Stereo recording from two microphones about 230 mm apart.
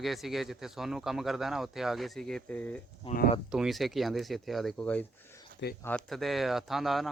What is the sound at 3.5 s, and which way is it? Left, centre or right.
A man's voice, centre.